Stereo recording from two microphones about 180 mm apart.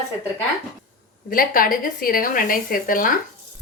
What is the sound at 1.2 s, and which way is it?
A woman's voice, 50° left (ahead or behind).